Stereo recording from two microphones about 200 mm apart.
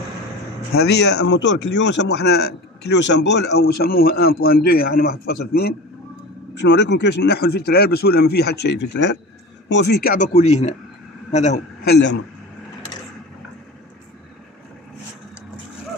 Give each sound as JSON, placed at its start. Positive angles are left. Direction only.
{"t": 0.7, "sound": "a man's voice", "side_deg": 55}
{"t": 11.8, "sound": "a man's voice", "side_deg": 60}